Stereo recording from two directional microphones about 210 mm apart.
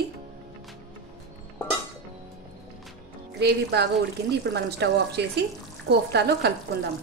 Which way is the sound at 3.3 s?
50° right (ahead or behind).